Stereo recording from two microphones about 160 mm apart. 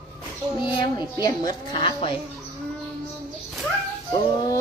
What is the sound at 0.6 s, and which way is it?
A child's voice, 30° left (ahead or behind).